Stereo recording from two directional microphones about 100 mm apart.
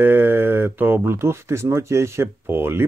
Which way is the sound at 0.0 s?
20° right (ahead or behind).